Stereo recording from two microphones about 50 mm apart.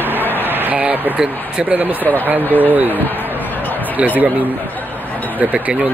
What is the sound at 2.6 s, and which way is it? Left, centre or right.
Speech, right.